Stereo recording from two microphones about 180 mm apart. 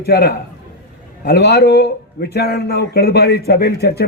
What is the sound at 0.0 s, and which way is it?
Speech, 60° left (ahead or behind).